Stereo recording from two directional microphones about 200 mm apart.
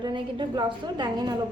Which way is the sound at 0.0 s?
25° right (ahead or behind).